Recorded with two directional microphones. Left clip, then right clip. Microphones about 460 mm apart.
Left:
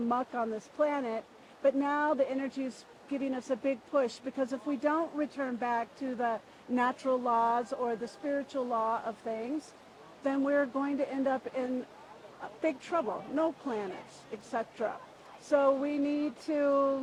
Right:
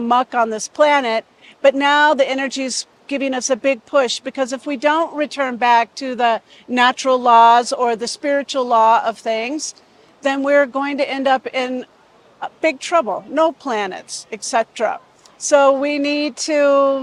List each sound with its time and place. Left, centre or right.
0.1 s speech: right